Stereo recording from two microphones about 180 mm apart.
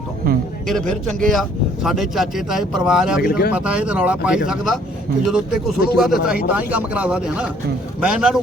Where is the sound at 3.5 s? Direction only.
5° right (ahead or behind).